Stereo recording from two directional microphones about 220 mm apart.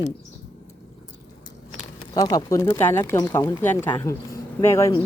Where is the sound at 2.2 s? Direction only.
15° left (ahead or behind).